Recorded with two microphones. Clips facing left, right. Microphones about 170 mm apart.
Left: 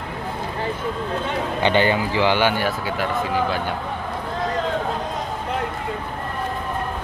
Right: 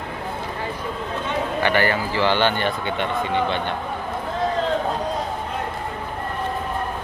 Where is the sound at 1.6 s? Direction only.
20° left (ahead or behind); by 3.7 s 5° left (ahead or behind).